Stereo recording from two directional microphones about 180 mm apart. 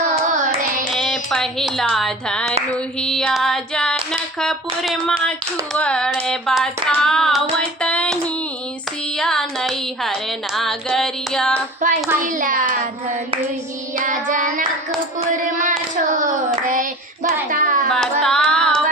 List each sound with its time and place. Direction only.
0.1 s carnatic music: 45° right (ahead or behind)
1.3 s music: centre (ahead or behind)
2.7 s a sound: 5° left (ahead or behind)
5.7 s music: 5° left (ahead or behind)
7.8 s hands: 5° left (ahead or behind)
9.1 s music: 5° left (ahead or behind)
11.8 s a child's voice: 45° right (ahead or behind)
14.0 s a child's voice: 45° right (ahead or behind)
16.1 s hands: 45° right (ahead or behind)
17.5 s a sound: 45° right (ahead or behind)
17.8 s singing: 5° left (ahead or behind)